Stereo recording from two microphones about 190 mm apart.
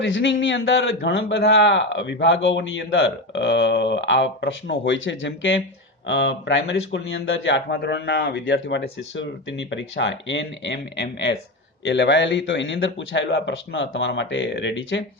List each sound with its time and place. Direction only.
0.0 s a man's voice: 75° left (ahead or behind)
7.7 s a man's voice: 60° left (ahead or behind)
8.4 s a man's voice: 80° left